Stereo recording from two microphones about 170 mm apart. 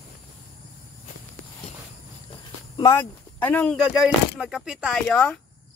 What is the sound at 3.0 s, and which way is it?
Speech, 10° left (ahead or behind).